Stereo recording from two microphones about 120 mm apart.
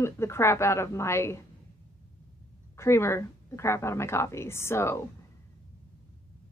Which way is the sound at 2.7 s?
20° left (ahead or behind).